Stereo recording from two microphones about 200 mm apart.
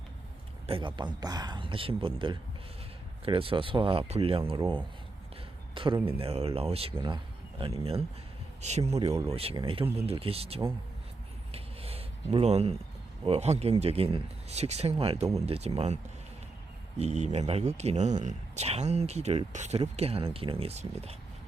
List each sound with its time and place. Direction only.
0.7 s speech: 25° right (ahead or behind)
5.7 s speech: 25° right (ahead or behind)
11.5 s a sound: 30° right (ahead or behind)
13.2 s speech: 30° right (ahead or behind)
17.0 s speech: 35° right (ahead or behind)